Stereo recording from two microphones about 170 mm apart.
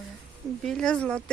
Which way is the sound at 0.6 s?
5° left (ahead or behind).